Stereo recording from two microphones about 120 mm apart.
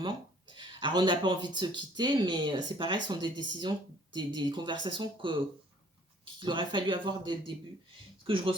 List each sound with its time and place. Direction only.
0.0 s speech: 40° right (ahead or behind)
6.4 s speech: 40° right (ahead or behind)